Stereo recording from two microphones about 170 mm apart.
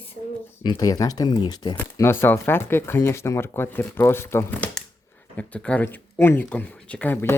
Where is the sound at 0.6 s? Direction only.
25° left (ahead or behind).